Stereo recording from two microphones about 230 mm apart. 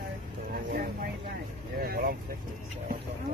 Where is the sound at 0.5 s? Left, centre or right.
Right.